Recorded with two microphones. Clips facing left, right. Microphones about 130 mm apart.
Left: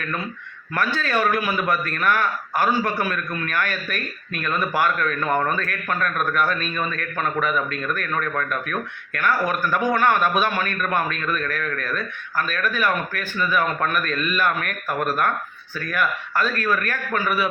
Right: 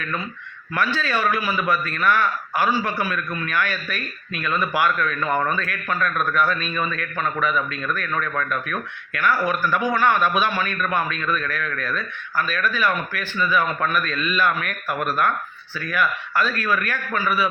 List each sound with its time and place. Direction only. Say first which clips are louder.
0.8 s a man's voice: left 1 dB; 45° left (ahead or behind)
15.8 s a man's voice: right 1 dB; 45° left (ahead or behind)